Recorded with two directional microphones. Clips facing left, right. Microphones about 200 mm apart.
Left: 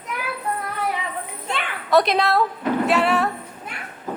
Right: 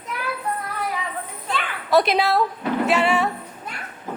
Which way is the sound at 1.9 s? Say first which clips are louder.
Even; centre (ahead or behind).